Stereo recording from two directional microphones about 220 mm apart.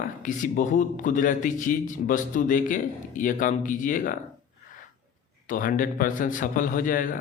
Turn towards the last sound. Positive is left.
turn(degrees=40)  # may be behind; listen again after turning